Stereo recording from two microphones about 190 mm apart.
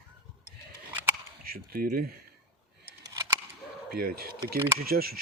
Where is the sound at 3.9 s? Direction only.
55° right (ahead or behind).